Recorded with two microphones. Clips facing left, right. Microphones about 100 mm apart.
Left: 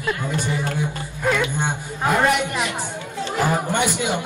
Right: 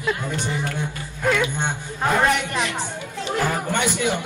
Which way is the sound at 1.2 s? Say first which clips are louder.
Even; 5° left (ahead or behind).